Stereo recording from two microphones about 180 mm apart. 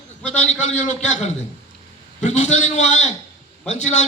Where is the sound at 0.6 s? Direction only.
40° left (ahead or behind).